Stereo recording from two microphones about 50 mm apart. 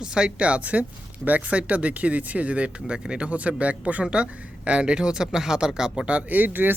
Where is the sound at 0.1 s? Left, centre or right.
Centre.